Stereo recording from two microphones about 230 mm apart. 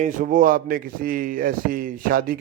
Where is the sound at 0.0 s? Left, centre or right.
Right.